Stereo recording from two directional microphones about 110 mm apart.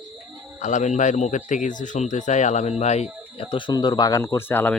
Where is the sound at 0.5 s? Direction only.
90° left.